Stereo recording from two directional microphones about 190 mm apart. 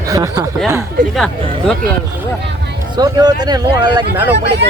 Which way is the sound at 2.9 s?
20° right (ahead or behind).